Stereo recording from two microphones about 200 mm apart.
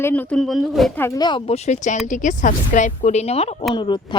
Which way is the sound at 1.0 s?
15° left (ahead or behind).